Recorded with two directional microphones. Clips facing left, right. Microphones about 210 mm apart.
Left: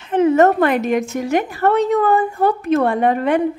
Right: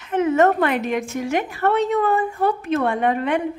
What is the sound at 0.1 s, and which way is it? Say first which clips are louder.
A woman's voice: left 4 dB; 35° left (ahead or behind).